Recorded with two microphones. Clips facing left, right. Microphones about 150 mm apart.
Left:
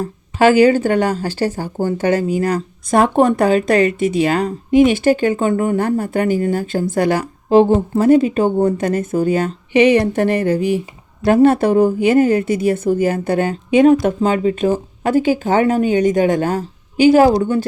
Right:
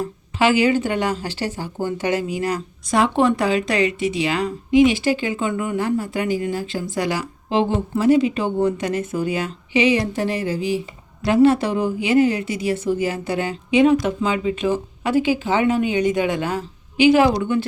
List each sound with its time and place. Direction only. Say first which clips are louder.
0.0 s speech: left 6 dB; 45° left (ahead or behind)